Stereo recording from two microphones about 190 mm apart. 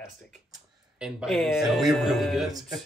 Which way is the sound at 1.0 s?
5° right (ahead or behind).